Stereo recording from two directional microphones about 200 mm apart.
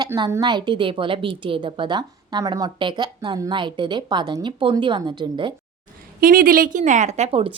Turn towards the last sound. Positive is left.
turn(degrees=-30)  # may be behind; listen again after turning